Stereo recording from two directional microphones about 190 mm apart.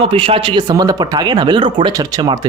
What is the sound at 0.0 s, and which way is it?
Speech, 30° right (ahead or behind).